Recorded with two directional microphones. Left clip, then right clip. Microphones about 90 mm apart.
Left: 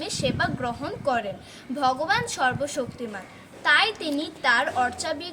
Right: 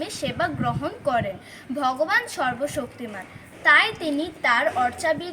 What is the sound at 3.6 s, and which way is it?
A woman's voice, 30° left (ahead or behind).